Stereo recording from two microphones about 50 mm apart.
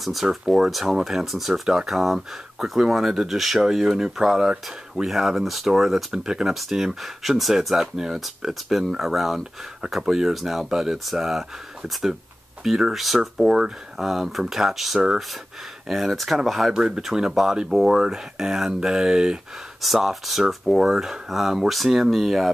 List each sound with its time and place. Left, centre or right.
0.0 s speech: centre
12.6 s speech: centre
16.7 s speech: centre
19.8 s speech: centre